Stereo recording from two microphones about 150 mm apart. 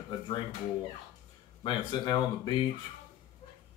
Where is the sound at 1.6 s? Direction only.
30° left (ahead or behind).